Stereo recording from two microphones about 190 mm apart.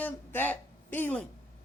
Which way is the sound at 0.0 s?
10° left (ahead or behind).